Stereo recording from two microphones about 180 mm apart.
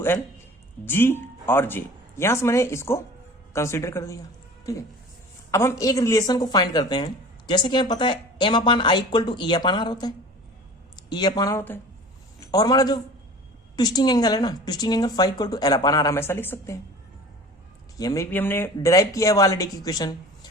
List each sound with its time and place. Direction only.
0.9 s a man's voice: 10° left (ahead or behind)
17.9 s speech: 20° left (ahead or behind)